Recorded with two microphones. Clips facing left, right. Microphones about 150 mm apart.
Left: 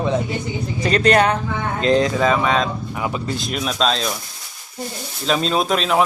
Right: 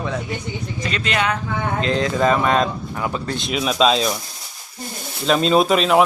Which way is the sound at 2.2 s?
Centre (ahead or behind).